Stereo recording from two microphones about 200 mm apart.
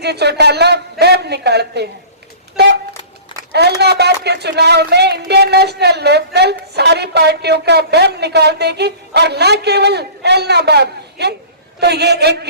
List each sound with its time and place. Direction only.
0.0 s a man's voice: 55° right (ahead or behind)
3.5 s speech: 55° right (ahead or behind)